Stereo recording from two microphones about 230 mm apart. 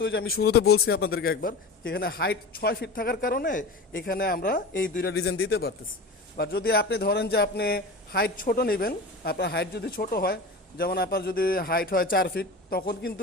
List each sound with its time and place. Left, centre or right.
0.0 s a man's voice: left
5.1 s a man's voice: left